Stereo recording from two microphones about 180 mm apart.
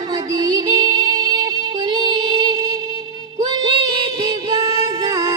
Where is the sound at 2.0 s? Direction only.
30° right (ahead or behind).